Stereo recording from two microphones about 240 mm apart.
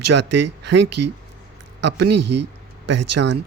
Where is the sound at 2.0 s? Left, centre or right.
Right.